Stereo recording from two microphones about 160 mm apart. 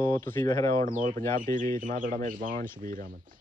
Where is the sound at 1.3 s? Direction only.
60° right (ahead or behind).